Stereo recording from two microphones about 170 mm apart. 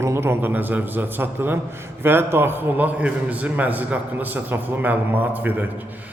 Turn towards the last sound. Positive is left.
turn(degrees=-10)  # may be behind; listen again after turning